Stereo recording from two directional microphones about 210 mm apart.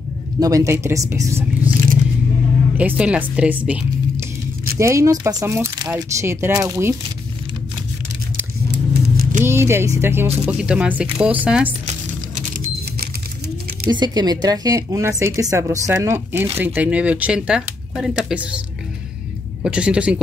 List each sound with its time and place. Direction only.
0.4 s speech: 15° right (ahead or behind)
2.8 s speech: 5° right (ahead or behind)
8.7 s vehicle: 45° right (ahead or behind)
9.4 s speech: 10° right (ahead or behind)
13.8 s speech: 20° right (ahead or behind)
19.6 s speech: 5° right (ahead or behind)